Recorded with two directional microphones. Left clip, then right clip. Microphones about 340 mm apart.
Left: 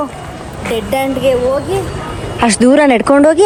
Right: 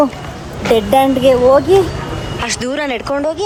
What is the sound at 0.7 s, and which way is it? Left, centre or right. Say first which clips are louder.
Speech: right 5 dB; centre.